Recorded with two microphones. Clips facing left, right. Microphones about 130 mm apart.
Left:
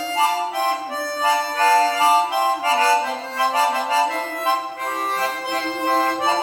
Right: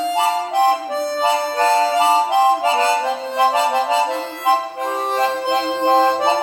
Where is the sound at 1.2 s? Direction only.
25° right (ahead or behind).